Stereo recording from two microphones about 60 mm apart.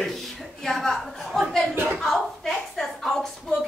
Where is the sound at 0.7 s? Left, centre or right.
Centre.